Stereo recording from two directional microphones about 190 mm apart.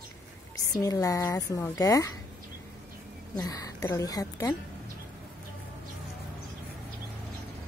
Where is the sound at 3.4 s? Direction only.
20° left (ahead or behind).